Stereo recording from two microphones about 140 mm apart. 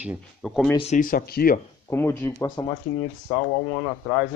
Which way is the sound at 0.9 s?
90° left.